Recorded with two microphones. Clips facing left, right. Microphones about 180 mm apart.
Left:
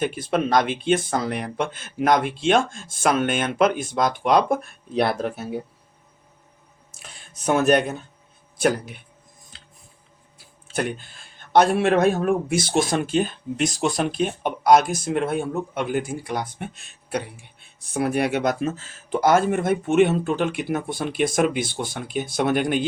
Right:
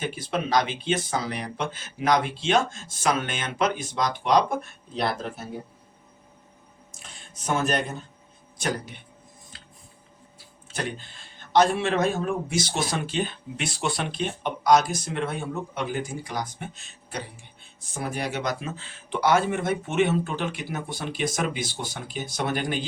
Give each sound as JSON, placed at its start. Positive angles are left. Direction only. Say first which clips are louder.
{"t": 0.0, "sound": "speech", "louder": "left 6 dB", "side_deg": 55}
{"t": 7.4, "sound": "speech", "louder": "left 7 dB", "side_deg": 60}
{"t": 11.5, "sound": "speech", "louder": "left 4 dB", "side_deg": 60}
{"t": 14.4, "sound": "speech", "louder": "left 3 dB", "side_deg": 55}